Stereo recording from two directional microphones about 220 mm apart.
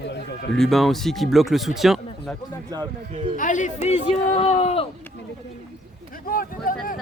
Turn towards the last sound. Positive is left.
turn(degrees=40)  # may be behind; listen again after turning